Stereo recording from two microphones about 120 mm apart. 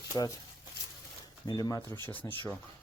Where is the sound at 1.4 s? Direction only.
35° left (ahead or behind).